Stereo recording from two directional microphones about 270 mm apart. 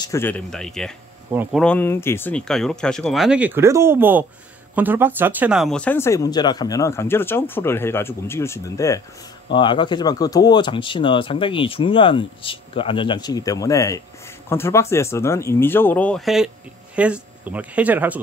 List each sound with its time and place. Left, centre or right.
0.0 s speech: centre
1.6 s speech: centre